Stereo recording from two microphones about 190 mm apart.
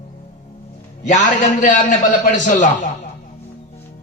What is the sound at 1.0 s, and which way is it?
A man's voice, 40° left (ahead or behind).